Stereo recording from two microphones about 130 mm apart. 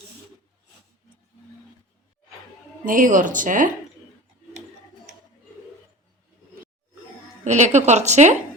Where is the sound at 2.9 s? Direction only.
90° right.